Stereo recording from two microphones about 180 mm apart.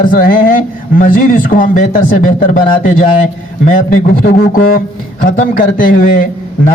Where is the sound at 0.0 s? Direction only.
50° left (ahead or behind).